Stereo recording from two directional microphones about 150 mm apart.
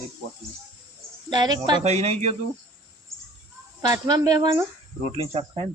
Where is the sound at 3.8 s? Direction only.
25° right (ahead or behind).